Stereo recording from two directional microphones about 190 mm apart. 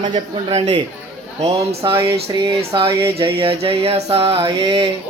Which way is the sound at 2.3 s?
30° right (ahead or behind).